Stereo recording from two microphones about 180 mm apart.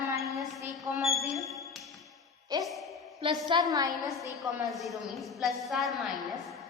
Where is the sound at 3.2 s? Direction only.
25° right (ahead or behind).